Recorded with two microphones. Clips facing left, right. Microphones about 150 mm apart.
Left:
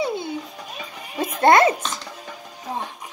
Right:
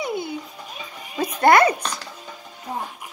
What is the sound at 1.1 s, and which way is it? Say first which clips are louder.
Speech: even; 25° left (ahead or behind).